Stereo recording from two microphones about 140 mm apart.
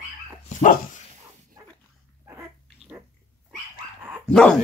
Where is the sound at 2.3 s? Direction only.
15° right (ahead or behind).